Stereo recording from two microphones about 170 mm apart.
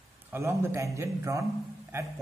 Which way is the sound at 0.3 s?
15° right (ahead or behind).